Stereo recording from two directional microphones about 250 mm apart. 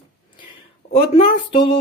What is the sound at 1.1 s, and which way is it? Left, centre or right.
Speech, left.